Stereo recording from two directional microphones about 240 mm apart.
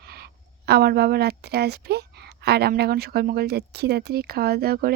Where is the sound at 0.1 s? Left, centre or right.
Right.